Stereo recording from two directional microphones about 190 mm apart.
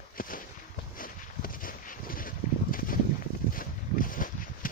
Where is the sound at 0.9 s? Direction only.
45° left (ahead or behind).